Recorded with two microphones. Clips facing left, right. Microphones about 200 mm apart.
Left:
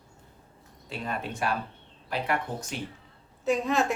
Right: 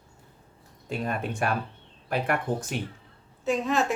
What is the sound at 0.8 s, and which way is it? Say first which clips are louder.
Speech: right 4 dB; 50° right (ahead or behind).